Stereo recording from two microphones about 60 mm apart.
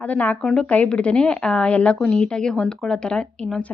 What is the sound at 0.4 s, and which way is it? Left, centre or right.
A woman's voice, centre.